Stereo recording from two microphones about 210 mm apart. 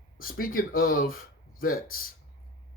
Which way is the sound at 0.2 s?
40° left (ahead or behind).